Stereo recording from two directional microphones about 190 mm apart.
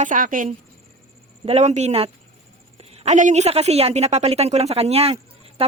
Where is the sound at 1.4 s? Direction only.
35° right (ahead or behind).